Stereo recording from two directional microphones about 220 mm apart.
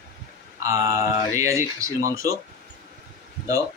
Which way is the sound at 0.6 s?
15° right (ahead or behind).